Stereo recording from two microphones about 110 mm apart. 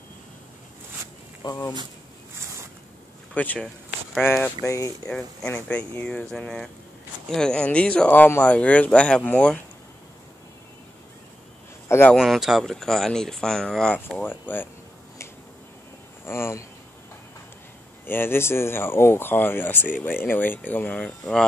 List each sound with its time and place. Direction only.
1.4 s speech: 35° left (ahead or behind)
3.3 s speech: 10° left (ahead or behind)
5.5 s speech: 15° left (ahead or behind)
12.2 s speech: 5° right (ahead or behind)
14.2 s speech: 15° left (ahead or behind)
16.3 s speech: 20° left (ahead or behind)
18.0 s speech: 20° left (ahead or behind)